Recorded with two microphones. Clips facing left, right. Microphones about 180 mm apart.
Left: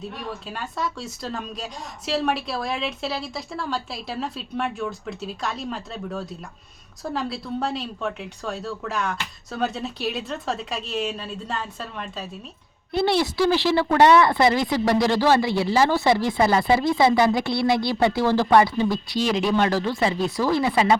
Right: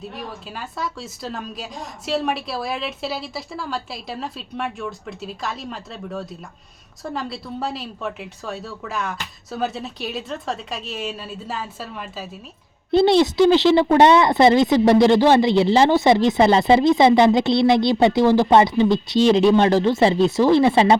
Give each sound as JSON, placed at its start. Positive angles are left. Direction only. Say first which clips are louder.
{"t": 0.0, "sound": "speech", "louder": "even", "side_deg": 0}
{"t": 12.9, "sound": "speech", "louder": "right 7 dB", "side_deg": -25}